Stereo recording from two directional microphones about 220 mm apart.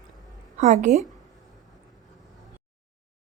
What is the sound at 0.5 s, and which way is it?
Speech, 35° right (ahead or behind).